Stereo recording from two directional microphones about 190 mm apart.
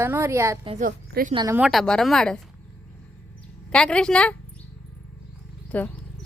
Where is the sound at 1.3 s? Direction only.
25° right (ahead or behind).